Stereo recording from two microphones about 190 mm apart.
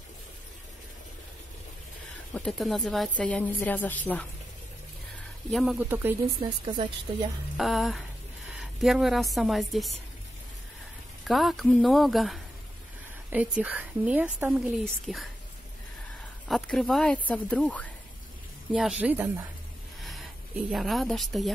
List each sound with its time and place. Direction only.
2.3 s a woman's voice: centre (ahead or behind)
5.5 s a woman's voice: centre (ahead or behind)
6.6 s a woman's voice: 25° right (ahead or behind)
7.5 s a woman's voice: centre (ahead or behind)
11.2 s a woman's voice: centre (ahead or behind)
16.4 s a woman's voice: centre (ahead or behind)
20.0 s a sound: centre (ahead or behind)
20.7 s a woman's voice: centre (ahead or behind)